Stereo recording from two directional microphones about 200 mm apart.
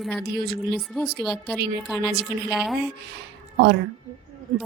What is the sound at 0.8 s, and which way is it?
A woman's voice, centre (ahead or behind).